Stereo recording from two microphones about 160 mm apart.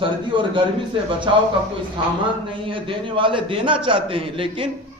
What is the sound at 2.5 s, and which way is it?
A man's voice, 35° right (ahead or behind).